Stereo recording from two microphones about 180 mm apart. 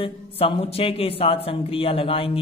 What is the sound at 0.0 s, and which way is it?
A man's voice, 30° left (ahead or behind).